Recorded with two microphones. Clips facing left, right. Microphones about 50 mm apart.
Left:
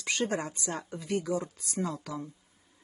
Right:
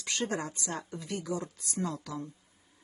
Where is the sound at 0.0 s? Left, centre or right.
Left.